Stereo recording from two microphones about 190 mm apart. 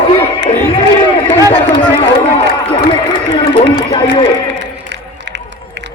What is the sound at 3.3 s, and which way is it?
Speech, 25° left (ahead or behind).